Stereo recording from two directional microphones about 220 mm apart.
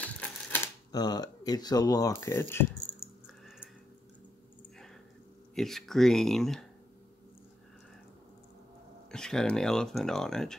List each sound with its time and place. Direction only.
0.0 s typewriter: 5° left (ahead or behind)
0.9 s speech: 20° left (ahead or behind)
3.4 s a sound: 5° right (ahead or behind)
5.5 s speech: centre (ahead or behind)
9.1 s speech: 5° left (ahead or behind)